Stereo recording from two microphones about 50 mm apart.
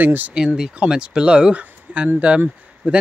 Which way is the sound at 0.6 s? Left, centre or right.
Centre.